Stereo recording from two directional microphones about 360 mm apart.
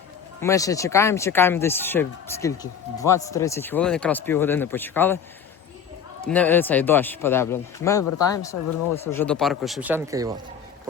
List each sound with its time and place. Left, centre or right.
0.3 s speech: centre
6.3 s a man's voice: centre